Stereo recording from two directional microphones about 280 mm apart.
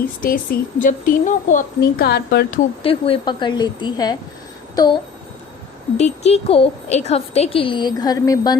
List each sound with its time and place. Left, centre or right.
0.2 s speech: left
2.8 s a woman's voice: centre
6.0 s a woman's voice: left